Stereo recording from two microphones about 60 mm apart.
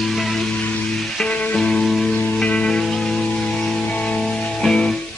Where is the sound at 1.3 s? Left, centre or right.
Left.